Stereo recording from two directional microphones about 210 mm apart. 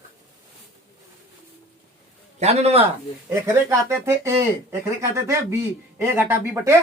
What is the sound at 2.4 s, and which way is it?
Speech, 30° right (ahead or behind).